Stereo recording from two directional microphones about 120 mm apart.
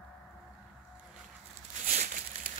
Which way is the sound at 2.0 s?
90° right.